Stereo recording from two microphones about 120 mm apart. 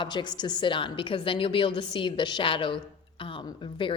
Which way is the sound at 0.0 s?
40° left (ahead or behind).